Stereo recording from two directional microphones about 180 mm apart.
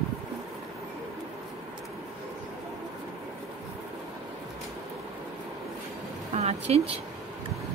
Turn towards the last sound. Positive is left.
turn(degrees=-35)  # may be behind; listen again after turning